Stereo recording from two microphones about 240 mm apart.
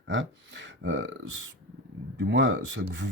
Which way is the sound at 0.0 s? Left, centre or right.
Right.